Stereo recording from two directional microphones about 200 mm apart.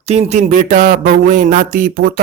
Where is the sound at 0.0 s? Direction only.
30° right (ahead or behind).